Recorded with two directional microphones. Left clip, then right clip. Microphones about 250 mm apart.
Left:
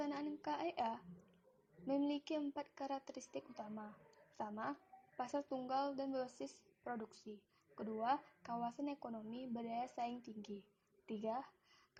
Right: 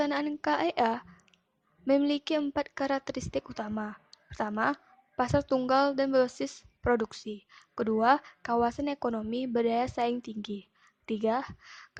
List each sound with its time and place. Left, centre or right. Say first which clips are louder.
0.0 s a woman's voice: right 15 dB; right